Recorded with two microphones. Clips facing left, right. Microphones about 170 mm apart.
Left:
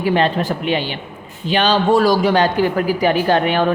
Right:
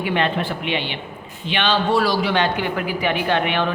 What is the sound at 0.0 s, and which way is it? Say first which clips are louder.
A woman's voice: left 5 dB; 35° left (ahead or behind).